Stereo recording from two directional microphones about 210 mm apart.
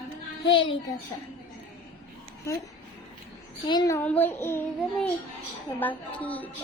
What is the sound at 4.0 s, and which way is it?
A child's voice, 10° left (ahead or behind).